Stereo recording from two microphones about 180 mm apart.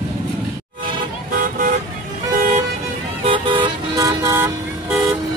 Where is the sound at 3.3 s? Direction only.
30° right (ahead or behind).